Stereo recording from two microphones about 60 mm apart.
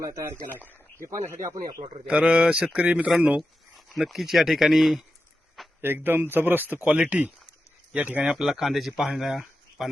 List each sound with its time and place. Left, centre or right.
0.0 s speech: right
2.0 s speech: centre
3.8 s speech: centre
5.8 s speech: right
6.8 s speech: right
8.2 s speech: centre
9.4 s a sound: centre